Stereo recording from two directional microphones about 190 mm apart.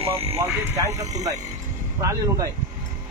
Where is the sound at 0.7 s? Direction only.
15° right (ahead or behind).